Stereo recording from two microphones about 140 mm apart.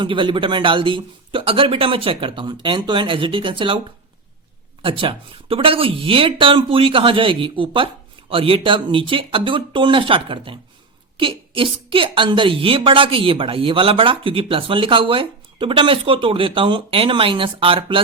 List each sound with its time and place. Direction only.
0.0 s a woman's voice: 35° right (ahead or behind)
4.8 s a woman's voice: 40° right (ahead or behind)